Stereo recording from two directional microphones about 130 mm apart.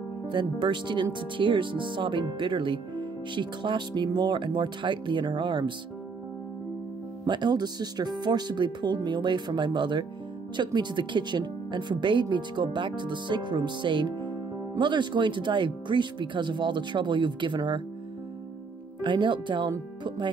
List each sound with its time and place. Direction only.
0.3 s speech: 35° right (ahead or behind)
7.2 s speech: 35° right (ahead or behind)
18.9 s speech: 40° right (ahead or behind)